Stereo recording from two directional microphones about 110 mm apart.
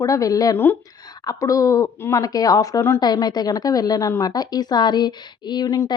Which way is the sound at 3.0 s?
40° left (ahead or behind).